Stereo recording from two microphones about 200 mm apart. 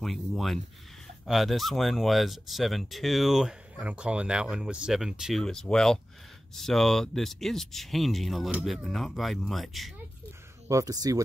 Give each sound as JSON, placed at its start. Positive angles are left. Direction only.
{"t": 0.0, "sound": "speech", "side_deg": 0}
{"t": 10.7, "sound": "speech", "side_deg": -15}